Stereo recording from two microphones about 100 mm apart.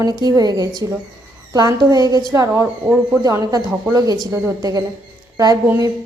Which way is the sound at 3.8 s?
35° right (ahead or behind).